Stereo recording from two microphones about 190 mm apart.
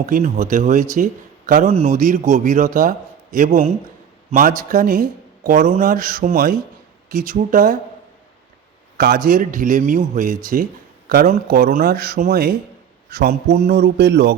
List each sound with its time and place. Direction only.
0.0 s a man's voice: 45° right (ahead or behind)
9.0 s a man's voice: 50° right (ahead or behind)